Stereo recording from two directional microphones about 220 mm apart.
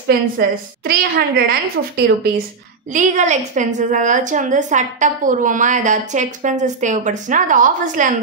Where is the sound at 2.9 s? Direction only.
35° right (ahead or behind).